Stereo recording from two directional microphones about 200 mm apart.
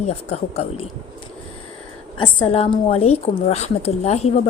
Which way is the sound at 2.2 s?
25° left (ahead or behind).